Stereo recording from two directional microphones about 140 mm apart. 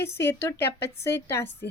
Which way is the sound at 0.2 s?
20° left (ahead or behind).